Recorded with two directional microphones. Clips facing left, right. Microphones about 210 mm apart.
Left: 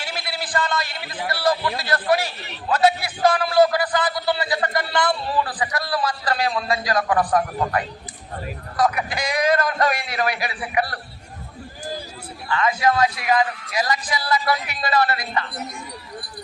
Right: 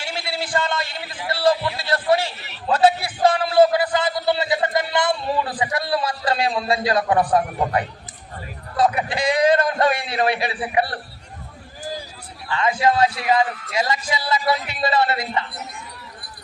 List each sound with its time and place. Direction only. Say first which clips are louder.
0.0 s a sound: right 2 dB; 25° right (ahead or behind)
1.3 s a man's voice: right 3 dB; 25° right (ahead or behind)
12.5 s a man's voice: right 1 dB; 25° right (ahead or behind)